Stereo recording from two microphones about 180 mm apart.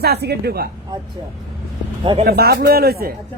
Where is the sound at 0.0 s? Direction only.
65° right (ahead or behind).